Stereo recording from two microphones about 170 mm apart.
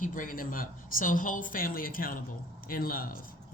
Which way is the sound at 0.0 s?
50° left (ahead or behind).